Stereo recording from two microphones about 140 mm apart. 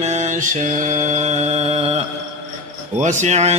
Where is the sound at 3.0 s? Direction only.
60° right (ahead or behind).